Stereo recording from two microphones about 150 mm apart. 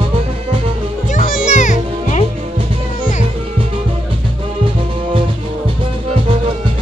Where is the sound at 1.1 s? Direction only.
60° left (ahead or behind).